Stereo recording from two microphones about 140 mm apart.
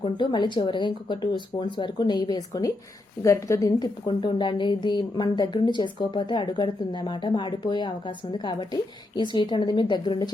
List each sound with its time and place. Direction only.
0.0 s a woman's voice: 35° left (ahead or behind)